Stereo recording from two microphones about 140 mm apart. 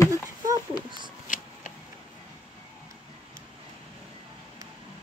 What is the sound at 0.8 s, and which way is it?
Speech, 35° right (ahead or behind).